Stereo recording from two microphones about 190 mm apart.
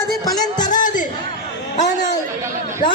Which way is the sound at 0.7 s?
45° left (ahead or behind).